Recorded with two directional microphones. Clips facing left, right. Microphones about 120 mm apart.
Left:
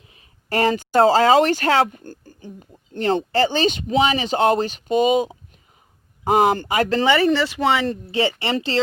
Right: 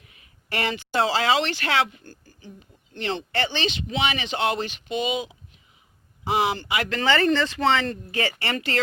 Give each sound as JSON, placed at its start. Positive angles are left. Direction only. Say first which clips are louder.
{"t": 0.0, "sound": "speech", "louder": "left 2 dB", "side_deg": 30}
{"t": 7.0, "sound": "speech", "louder": "left 1 dB", "side_deg": 10}
{"t": 8.1, "sound": "speech", "louder": "left 7 dB", "side_deg": 25}